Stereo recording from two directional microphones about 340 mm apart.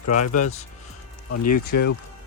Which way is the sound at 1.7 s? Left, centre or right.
Left.